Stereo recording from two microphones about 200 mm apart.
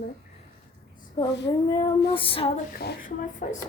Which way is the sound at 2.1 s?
25° left (ahead or behind).